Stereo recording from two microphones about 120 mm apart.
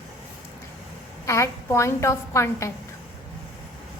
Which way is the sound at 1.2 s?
25° left (ahead or behind).